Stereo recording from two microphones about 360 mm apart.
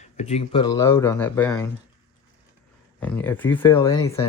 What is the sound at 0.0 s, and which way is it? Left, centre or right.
Speech, centre.